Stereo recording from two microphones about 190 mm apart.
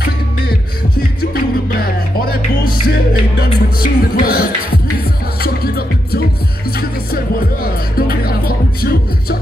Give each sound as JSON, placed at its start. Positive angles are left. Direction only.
{"t": 1.3, "sound": "music", "side_deg": 50}